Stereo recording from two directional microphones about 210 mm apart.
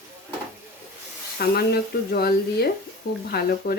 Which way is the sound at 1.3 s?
45° left (ahead or behind).